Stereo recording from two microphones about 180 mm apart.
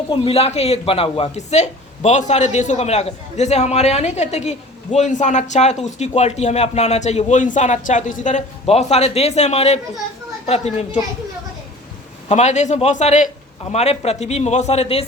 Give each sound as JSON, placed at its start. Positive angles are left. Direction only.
{"t": 0.1, "sound": "a man's voice", "side_deg": 35}
{"t": 12.3, "sound": "a man's voice", "side_deg": 40}